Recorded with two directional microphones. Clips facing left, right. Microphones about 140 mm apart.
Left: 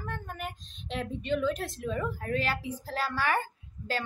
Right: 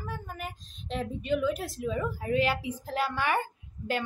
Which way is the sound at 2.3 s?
15° right (ahead or behind).